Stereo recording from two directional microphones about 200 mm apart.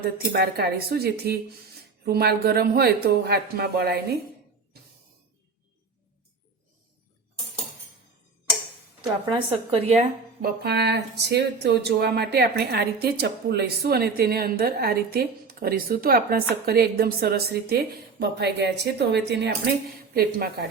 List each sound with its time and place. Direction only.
0.2 s speech: 50° right (ahead or behind)
9.3 s a woman's voice: 30° right (ahead or behind)
10.4 s speech: 55° right (ahead or behind)